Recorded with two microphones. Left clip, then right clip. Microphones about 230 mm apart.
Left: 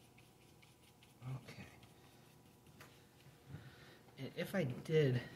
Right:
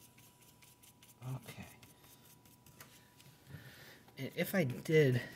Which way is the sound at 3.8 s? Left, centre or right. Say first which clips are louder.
Right 5 dB; right.